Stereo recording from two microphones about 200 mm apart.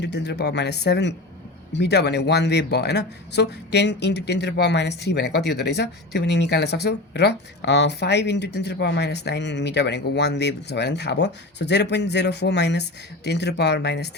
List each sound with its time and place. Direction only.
0.0 s a man's voice: 60° left (ahead or behind)